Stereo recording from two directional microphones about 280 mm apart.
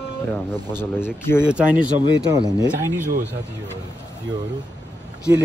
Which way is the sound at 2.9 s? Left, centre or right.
Right.